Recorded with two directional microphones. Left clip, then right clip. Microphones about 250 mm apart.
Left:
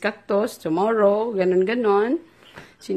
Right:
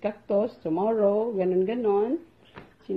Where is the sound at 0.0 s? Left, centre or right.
Left.